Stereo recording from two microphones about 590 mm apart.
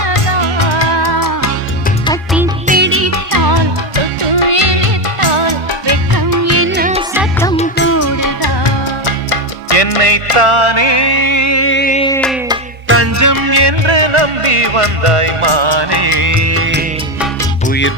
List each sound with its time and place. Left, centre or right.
0.0 s music: left
2.0 s music: centre
2.6 s music: centre; by 4.0 s right
4.2 s music: right; by 8.7 s left
9.0 s music: left; by 12.5 s centre
12.9 s music: right
17.7 s music: centre